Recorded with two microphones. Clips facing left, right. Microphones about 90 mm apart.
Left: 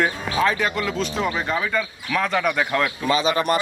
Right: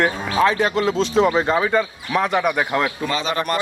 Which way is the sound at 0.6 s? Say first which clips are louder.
Right 5 dB; 30° right (ahead or behind).